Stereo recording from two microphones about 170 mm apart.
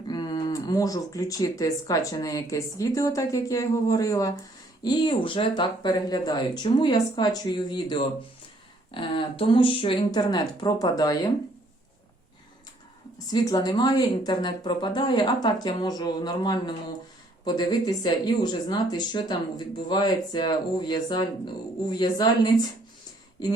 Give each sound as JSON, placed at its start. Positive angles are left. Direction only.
{"t": 0.1, "sound": "speech", "side_deg": 25}
{"t": 13.1, "sound": "speech", "side_deg": 20}